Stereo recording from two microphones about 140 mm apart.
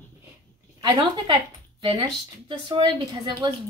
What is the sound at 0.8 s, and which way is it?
A woman's voice, 30° right (ahead or behind).